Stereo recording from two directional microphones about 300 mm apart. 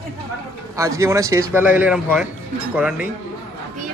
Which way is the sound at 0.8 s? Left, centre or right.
Centre.